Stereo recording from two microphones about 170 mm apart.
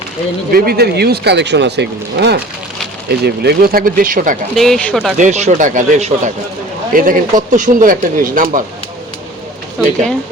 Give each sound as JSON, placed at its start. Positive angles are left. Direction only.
{"t": 0.5, "sound": "speech", "side_deg": -65}
{"t": 3.1, "sound": "speech", "side_deg": -70}
{"t": 4.5, "sound": "speech", "side_deg": 0}
{"t": 5.1, "sound": "speech", "side_deg": -45}
{"t": 6.9, "sound": "speech", "side_deg": -55}